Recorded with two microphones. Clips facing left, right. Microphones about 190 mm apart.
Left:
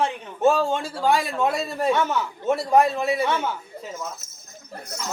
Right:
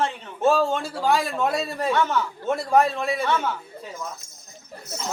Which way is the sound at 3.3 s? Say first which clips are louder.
Right 1 dB; 15° left (ahead or behind).